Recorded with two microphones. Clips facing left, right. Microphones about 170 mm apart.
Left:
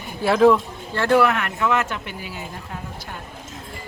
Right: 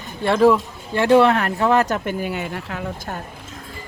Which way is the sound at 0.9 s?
20° right (ahead or behind).